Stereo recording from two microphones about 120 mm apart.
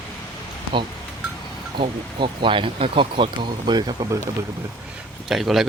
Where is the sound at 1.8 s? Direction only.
45° right (ahead or behind).